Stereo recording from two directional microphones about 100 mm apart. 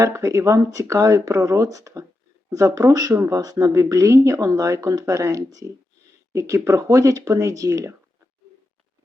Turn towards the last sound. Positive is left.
turn(degrees=-30)  # may be behind; listen again after turning